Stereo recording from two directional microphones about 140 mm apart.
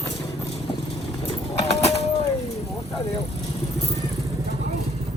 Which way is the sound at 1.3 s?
50° left (ahead or behind).